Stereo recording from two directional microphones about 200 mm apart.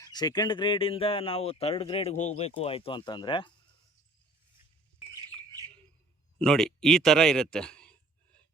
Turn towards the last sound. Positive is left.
turn(degrees=5)  # may be behind; listen again after turning